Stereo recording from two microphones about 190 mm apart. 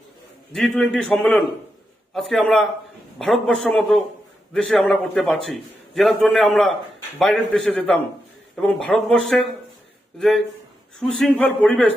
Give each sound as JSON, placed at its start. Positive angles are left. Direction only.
{"t": 0.5, "sound": "a man's voice", "side_deg": 0}